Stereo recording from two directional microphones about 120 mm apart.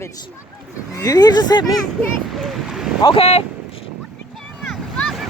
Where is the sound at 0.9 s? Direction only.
30° left (ahead or behind).